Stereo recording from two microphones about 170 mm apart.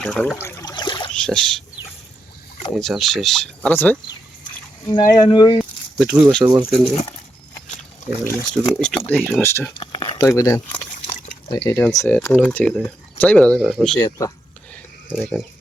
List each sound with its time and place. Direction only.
0.0 s speech: 5° left (ahead or behind)
0.4 s a sound: 15° left (ahead or behind)
1.2 s speech: 5° left (ahead or behind)
2.7 s speech: centre (ahead or behind)
4.9 s speech: 25° left (ahead or behind)
6.0 s speech: 5° right (ahead or behind)
8.2 s speech: 10° left (ahead or behind)
9.7 s a sound: 25° left (ahead or behind)
10.2 s speech: 20° left (ahead or behind)
11.4 s speech: 30° left (ahead or behind)
11.9 s speech: 15° left (ahead or behind)
13.6 s speech: 10° right (ahead or behind)
14.0 s speech: 20° left (ahead or behind)
14.7 s a sound: 5° left (ahead or behind)